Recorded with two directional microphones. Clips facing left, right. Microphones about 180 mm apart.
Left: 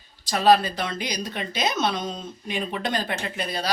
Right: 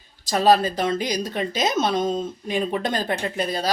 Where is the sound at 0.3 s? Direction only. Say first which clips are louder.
Right 1 dB; 40° right (ahead or behind).